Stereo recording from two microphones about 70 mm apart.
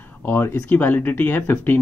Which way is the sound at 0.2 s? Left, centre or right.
Left.